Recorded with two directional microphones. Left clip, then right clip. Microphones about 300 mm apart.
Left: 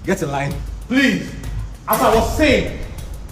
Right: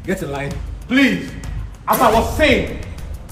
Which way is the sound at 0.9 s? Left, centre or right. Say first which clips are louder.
Right 2 dB; centre.